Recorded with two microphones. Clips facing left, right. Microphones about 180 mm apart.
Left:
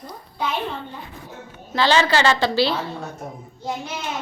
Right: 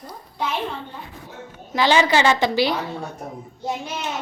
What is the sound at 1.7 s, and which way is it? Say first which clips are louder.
Speech: right 1 dB; 15° right (ahead or behind).